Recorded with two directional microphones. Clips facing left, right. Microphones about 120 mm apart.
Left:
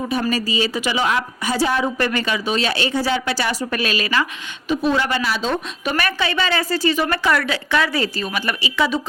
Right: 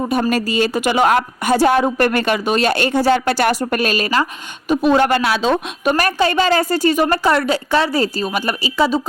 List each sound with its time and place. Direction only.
0.1 s a woman's voice: 55° right (ahead or behind)
4.7 s speech: 50° right (ahead or behind); by 5.5 s 70° right (ahead or behind)
5.8 s a woman's voice: 45° right (ahead or behind)
7.1 s a woman's voice: 35° right (ahead or behind)